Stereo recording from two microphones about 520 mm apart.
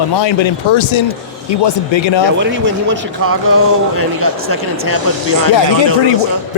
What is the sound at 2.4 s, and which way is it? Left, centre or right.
Speech, right.